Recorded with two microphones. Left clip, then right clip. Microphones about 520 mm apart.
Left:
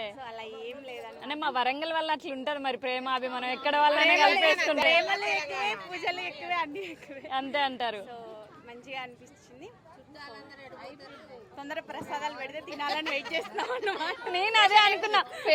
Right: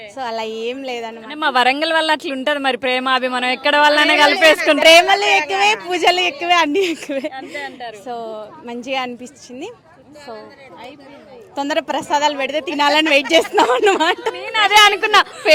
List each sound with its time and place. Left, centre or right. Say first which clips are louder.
0.2 s a woman's voice: right 17 dB; right
1.4 s speech: right 14 dB; centre
4.9 s a woman's voice: right 19 dB; right
7.3 s a woman's voice: right 1 dB; left
8.0 s a woman's voice: right 16 dB; right
11.5 s a woman's voice: right 18 dB; right
14.7 s speech: right 11 dB; centre